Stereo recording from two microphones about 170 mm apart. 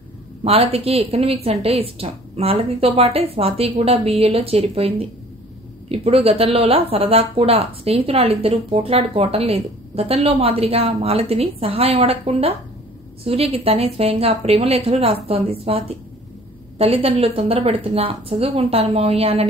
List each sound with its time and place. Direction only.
0.4 s a woman's voice: 35° right (ahead or behind)